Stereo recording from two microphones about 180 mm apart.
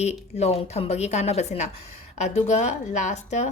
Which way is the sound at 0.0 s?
35° left (ahead or behind).